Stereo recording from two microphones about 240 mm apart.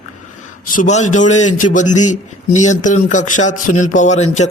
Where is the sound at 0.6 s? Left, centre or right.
Left.